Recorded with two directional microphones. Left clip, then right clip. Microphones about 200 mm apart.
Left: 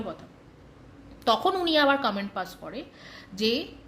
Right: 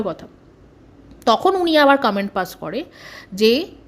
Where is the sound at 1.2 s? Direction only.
35° right (ahead or behind).